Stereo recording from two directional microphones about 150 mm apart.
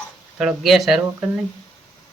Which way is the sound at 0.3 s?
Centre (ahead or behind).